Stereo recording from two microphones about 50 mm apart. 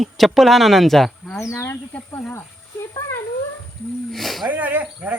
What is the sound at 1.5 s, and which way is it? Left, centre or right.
Speech, left.